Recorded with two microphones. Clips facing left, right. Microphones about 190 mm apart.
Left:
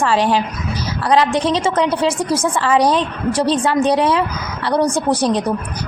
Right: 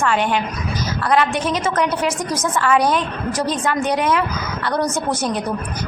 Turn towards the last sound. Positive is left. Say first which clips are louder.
# left 5 dB
turn(degrees=30)  # may be behind; listen again after turning